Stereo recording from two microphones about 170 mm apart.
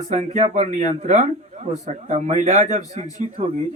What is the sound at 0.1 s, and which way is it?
Speech, 40° right (ahead or behind).